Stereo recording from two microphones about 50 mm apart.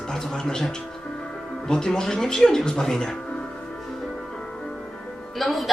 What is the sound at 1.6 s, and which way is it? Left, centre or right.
Speech, centre.